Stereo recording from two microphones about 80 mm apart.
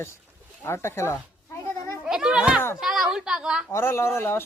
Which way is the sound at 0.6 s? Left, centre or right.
Left.